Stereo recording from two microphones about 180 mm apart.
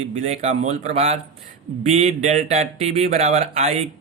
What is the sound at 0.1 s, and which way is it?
Speech, 40° right (ahead or behind).